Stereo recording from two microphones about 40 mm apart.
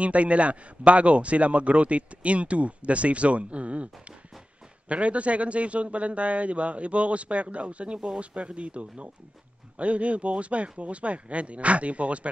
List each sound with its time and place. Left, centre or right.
0.0 s a man's voice: right